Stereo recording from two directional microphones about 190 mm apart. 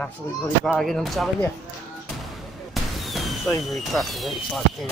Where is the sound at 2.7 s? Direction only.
Centre (ahead or behind).